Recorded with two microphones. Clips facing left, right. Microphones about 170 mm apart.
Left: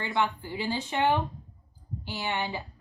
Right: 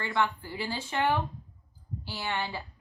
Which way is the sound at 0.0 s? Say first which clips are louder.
Left 1 dB; 20° left (ahead or behind).